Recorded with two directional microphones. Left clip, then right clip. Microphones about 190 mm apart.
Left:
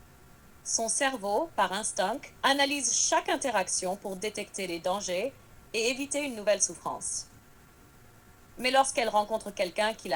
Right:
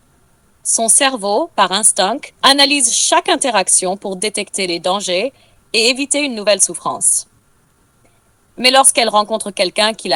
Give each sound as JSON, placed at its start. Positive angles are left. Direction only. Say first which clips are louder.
{"t": 0.7, "sound": "a woman's voice", "louder": "right 14 dB", "side_deg": -45}
{"t": 8.5, "sound": "a woman's voice", "louder": "right 14 dB", "side_deg": -45}